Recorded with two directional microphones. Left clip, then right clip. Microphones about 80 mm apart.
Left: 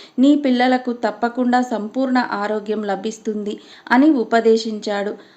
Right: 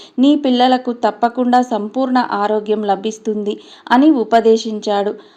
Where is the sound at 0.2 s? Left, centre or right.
Right.